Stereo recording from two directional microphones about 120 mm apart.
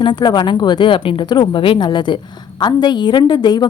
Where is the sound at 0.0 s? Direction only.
40° left (ahead or behind).